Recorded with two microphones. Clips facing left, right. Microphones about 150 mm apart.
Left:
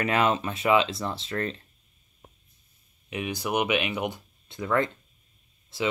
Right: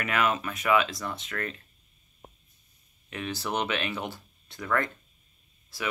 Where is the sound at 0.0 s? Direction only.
30° left (ahead or behind).